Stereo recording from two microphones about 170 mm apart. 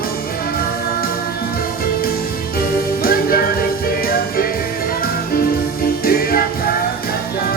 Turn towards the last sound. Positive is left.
turn(degrees=60)  # may be behind; listen again after turning